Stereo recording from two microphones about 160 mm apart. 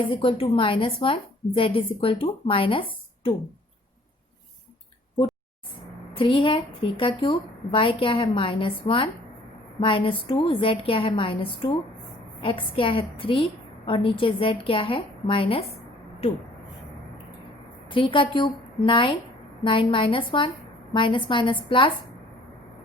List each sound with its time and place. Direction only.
0.1 s a woman's voice: 30° left (ahead or behind)
6.1 s a woman's voice: 35° left (ahead or behind)
17.8 s a woman's voice: 30° left (ahead or behind)